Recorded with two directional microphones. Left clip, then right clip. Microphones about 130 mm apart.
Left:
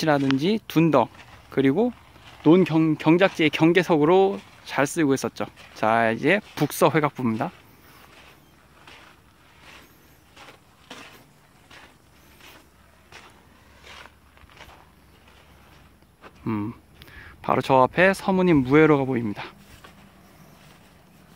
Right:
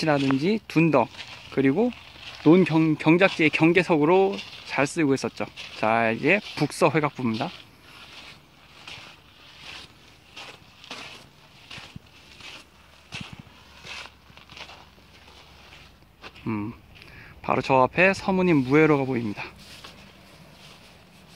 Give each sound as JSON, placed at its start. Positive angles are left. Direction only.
{"t": 0.0, "sound": "speech", "side_deg": 15}
{"t": 2.4, "sound": "speech", "side_deg": 0}
{"t": 13.1, "sound": "vehicle", "side_deg": 0}
{"t": 16.2, "sound": "a sound", "side_deg": 15}
{"t": 17.7, "sound": "speech", "side_deg": 35}
{"t": 18.1, "sound": "speech", "side_deg": 15}